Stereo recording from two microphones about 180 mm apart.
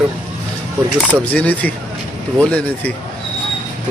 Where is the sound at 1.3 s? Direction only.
10° left (ahead or behind).